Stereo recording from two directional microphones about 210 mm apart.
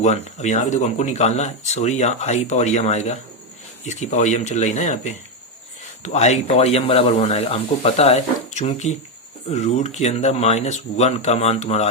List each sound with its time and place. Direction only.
0.0 s speech: 35° left (ahead or behind)